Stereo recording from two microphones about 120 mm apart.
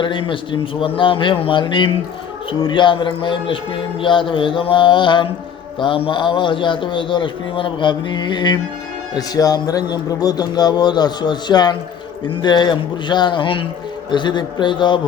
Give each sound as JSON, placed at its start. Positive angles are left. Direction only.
{"t": 0.0, "sound": "a man's voice", "side_deg": 45}